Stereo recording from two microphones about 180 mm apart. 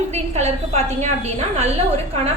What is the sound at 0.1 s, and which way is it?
A woman's voice, 35° right (ahead or behind).